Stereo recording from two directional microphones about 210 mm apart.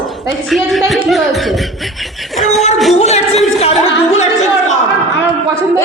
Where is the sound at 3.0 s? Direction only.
30° left (ahead or behind).